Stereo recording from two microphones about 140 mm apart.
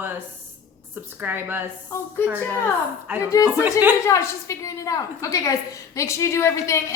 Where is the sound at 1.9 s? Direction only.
20° left (ahead or behind).